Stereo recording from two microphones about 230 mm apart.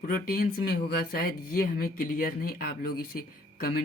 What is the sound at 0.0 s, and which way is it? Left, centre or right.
Speech, left.